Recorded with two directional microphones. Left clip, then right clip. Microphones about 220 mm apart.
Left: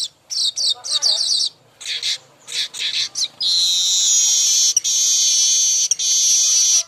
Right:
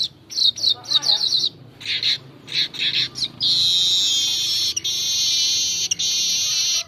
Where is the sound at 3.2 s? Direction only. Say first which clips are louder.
Left 3 dB; 10° left (ahead or behind).